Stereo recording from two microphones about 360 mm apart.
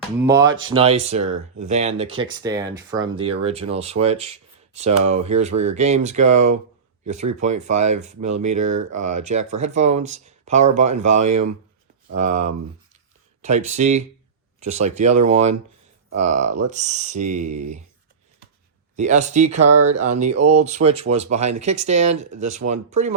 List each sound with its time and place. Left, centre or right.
0.2 s speech: centre
18.9 s speech: centre